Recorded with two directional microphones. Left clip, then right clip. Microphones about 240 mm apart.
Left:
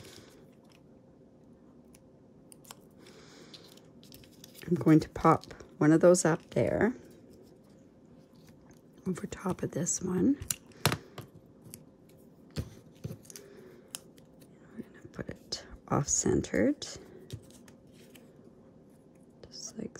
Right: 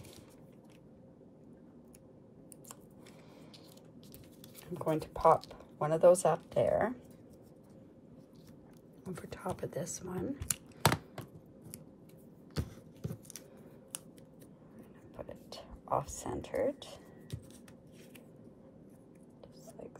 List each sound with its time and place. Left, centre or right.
4.7 s speech: left
9.0 s speech: left
10.4 s computer keyboard: centre
12.5 s a sound: centre
15.1 s whispering: left